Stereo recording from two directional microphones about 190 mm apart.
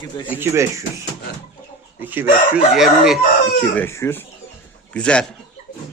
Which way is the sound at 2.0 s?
10° right (ahead or behind).